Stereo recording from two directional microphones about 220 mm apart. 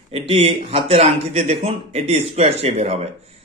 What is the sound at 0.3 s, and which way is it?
Speech, 25° right (ahead or behind).